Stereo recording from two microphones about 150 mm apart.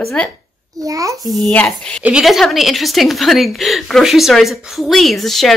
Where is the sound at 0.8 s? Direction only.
20° right (ahead or behind).